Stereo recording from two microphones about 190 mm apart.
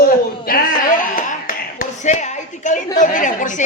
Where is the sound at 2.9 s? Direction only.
40° left (ahead or behind).